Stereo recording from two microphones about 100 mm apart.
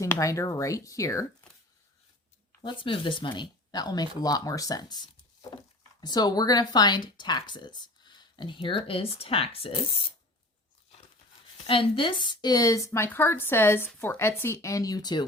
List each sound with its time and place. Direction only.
0.0 s speech: 35° left (ahead or behind)
2.6 s speech: 55° left (ahead or behind); by 9.8 s 70° left (ahead or behind)
11.6 s speech: 65° left (ahead or behind); by 15.2 s 40° left (ahead or behind)